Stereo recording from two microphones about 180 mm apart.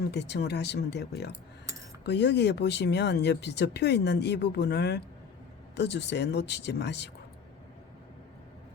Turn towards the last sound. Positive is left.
turn(degrees=70)  # may be behind; listen again after turning